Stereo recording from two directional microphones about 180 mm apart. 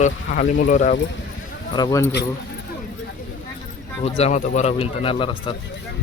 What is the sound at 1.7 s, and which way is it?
Speech, 20° left (ahead or behind).